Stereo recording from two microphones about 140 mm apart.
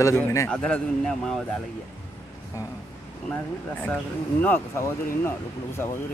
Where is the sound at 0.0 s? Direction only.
20° left (ahead or behind).